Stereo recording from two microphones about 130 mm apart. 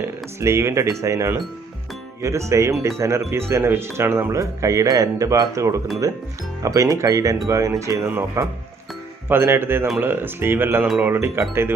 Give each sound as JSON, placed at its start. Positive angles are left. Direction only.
{"t": 0.3, "sound": "speech", "side_deg": -20}
{"t": 10.8, "sound": "speech", "side_deg": -5}
{"t": 11.1, "sound": "speech", "side_deg": -20}